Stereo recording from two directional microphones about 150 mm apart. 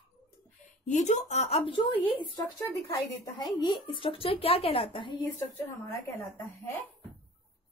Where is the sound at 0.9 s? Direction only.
50° left (ahead or behind); by 1.9 s 35° left (ahead or behind).